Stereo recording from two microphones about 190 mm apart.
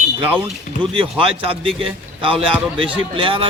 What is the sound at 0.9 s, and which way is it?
A man's voice, 25° right (ahead or behind).